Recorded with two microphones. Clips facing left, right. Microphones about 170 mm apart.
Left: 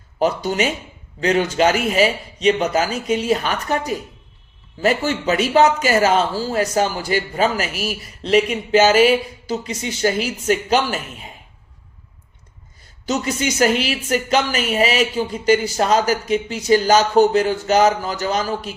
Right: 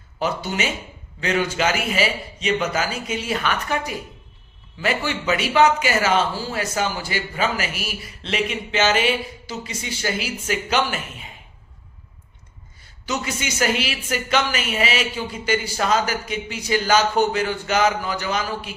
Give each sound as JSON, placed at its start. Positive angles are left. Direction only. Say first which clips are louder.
{"t": 0.2, "sound": "a man's voice", "louder": "left 6 dB", "side_deg": 40}
{"t": 13.1, "sound": "a man's voice", "louder": "left 6 dB", "side_deg": 40}